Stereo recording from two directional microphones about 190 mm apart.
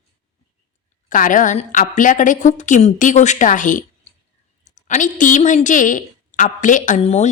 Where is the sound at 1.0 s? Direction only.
45° left (ahead or behind).